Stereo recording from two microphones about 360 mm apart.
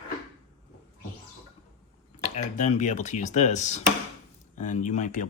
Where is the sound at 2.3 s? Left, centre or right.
Centre.